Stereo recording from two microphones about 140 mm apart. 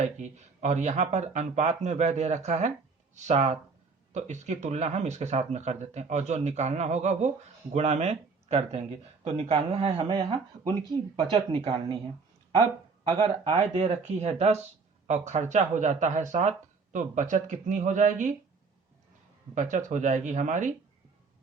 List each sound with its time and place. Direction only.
0.0 s speech: 55° right (ahead or behind); by 11.9 s 35° right (ahead or behind)
13.6 s speech: 50° right (ahead or behind)
19.5 s speech: 65° right (ahead or behind)